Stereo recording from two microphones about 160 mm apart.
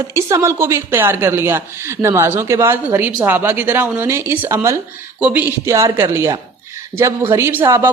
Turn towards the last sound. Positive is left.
turn(degrees=-15)  # may be behind; listen again after turning